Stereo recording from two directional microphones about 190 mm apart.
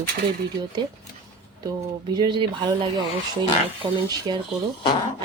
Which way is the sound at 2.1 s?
25° right (ahead or behind).